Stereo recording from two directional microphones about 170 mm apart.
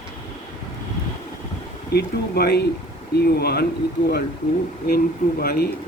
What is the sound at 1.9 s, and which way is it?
Speech, 70° left (ahead or behind).